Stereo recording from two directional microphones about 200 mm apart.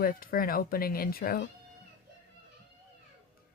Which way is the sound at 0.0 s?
45° left (ahead or behind).